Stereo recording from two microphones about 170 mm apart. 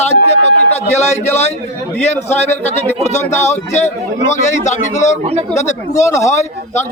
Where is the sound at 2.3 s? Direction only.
40° left (ahead or behind).